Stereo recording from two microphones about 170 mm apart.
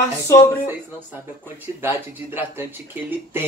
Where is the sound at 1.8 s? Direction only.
15° right (ahead or behind).